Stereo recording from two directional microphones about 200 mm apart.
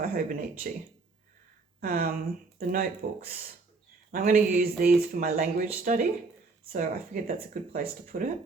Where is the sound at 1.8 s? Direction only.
45° right (ahead or behind).